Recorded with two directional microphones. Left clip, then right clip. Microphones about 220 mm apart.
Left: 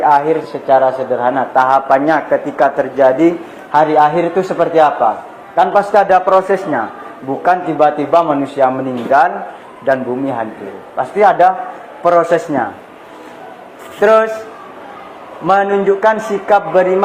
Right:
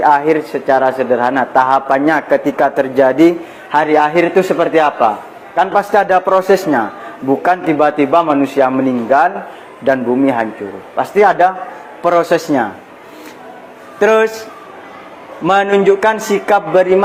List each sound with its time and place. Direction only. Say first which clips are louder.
0.0 s speech: even; 60° right (ahead or behind)
14.0 s speech: left 1 dB; 65° right (ahead or behind)
15.4 s a man's voice: right 1 dB; 55° right (ahead or behind)